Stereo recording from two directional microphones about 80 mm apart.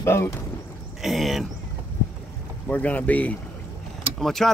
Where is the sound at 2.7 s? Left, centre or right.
Centre.